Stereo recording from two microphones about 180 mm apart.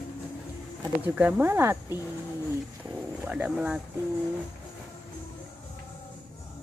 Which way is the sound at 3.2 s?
10° right (ahead or behind).